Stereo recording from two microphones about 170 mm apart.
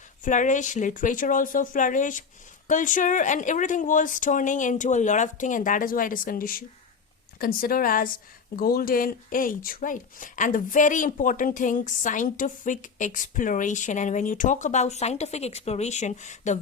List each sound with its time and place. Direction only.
0.3 s a woman's voice: 45° left (ahead or behind)